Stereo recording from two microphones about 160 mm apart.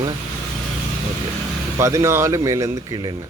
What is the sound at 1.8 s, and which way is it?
Speech, 20° right (ahead or behind).